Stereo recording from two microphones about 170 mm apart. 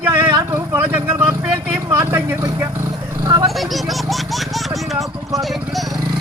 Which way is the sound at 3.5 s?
Centre (ahead or behind).